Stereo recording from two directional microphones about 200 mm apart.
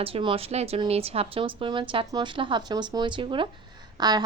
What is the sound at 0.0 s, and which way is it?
Speech, 25° right (ahead or behind).